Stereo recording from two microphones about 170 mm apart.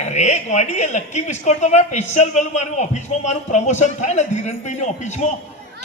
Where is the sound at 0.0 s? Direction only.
40° left (ahead or behind).